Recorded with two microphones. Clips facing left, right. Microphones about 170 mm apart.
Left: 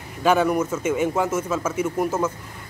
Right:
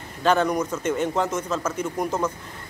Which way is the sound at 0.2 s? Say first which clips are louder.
Left 2 dB; 10° left (ahead or behind).